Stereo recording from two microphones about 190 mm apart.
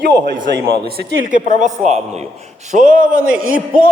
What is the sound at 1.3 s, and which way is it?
A man's voice, 40° right (ahead or behind).